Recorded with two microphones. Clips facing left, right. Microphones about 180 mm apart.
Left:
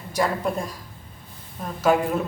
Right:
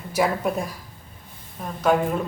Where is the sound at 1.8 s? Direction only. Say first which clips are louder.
Even; centre (ahead or behind).